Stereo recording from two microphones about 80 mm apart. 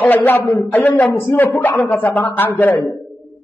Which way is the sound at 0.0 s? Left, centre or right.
Left.